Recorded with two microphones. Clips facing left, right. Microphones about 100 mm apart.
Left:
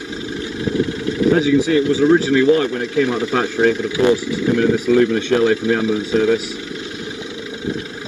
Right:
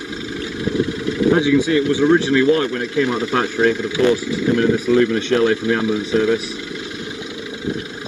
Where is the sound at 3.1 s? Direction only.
20° right (ahead or behind).